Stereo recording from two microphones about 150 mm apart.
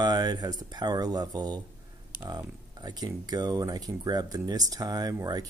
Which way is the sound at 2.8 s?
25° right (ahead or behind).